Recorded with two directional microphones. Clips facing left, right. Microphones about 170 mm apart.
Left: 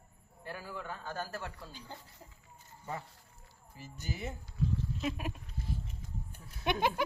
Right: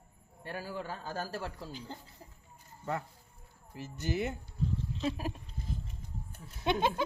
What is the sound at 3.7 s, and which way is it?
Speech, 75° right (ahead or behind).